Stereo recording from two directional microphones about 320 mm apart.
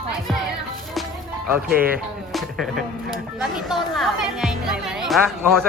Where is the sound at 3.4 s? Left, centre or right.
Centre.